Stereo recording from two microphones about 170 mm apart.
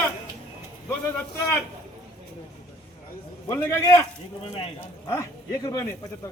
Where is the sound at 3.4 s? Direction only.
15° left (ahead or behind).